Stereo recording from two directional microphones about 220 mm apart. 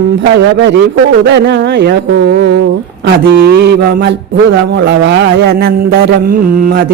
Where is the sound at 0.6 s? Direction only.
50° right (ahead or behind).